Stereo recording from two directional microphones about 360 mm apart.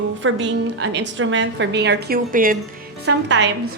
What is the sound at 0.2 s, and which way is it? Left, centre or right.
A woman's voice, right.